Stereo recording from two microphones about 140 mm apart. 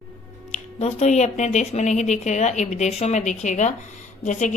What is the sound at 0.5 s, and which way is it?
Speech, 50° left (ahead or behind).